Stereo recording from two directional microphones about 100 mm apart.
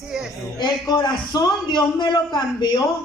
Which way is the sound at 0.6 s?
45° left (ahead or behind).